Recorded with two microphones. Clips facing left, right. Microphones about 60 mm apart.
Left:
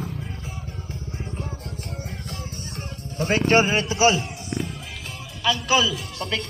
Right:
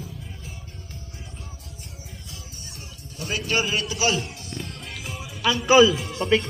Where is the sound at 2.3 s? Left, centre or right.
Left.